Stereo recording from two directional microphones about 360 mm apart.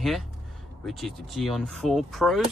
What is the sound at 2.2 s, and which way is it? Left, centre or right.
Speech, centre.